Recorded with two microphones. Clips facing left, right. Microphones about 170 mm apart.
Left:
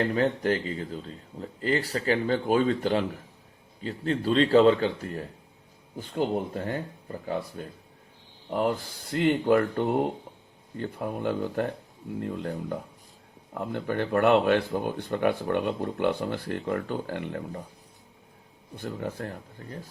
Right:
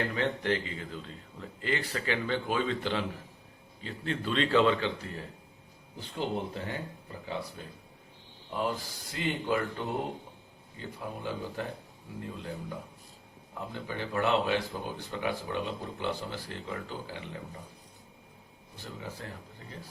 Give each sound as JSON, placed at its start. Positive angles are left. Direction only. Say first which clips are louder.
{"t": 0.1, "sound": "a man's voice", "louder": "left 5 dB", "side_deg": 40}
{"t": 18.8, "sound": "speech", "louder": "left 9 dB", "side_deg": 55}